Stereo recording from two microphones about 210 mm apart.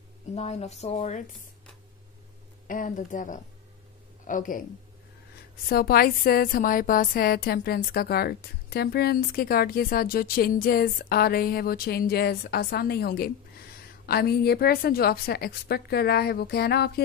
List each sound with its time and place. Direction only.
0.3 s speech: 30° left (ahead or behind)
2.7 s speech: 40° left (ahead or behind)
5.7 s a woman's voice: 45° left (ahead or behind)